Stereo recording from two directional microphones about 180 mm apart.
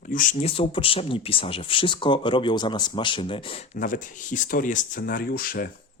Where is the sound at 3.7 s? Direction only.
45° left (ahead or behind).